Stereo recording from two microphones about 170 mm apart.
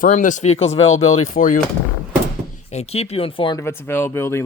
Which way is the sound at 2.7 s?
40° left (ahead or behind).